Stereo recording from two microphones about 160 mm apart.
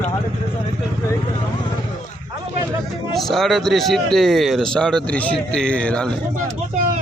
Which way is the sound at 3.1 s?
Centre (ahead or behind).